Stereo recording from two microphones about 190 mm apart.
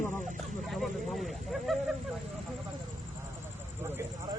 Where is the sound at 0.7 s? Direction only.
Centre (ahead or behind).